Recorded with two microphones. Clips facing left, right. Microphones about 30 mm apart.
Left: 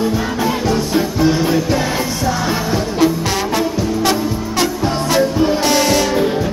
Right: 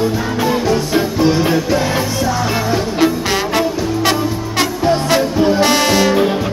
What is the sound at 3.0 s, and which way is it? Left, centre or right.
Music, right.